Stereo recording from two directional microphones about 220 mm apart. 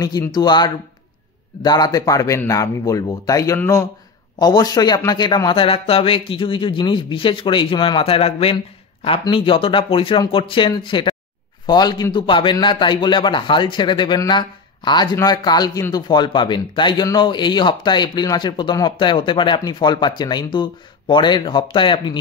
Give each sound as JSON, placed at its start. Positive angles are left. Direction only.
{"t": 0.0, "sound": "a man's voice", "side_deg": 15}